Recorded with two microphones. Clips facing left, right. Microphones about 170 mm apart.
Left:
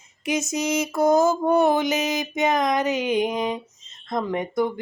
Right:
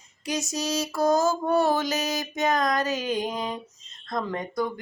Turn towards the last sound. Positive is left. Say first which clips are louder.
# left 5 dB
turn(degrees=20)  # may be behind; listen again after turning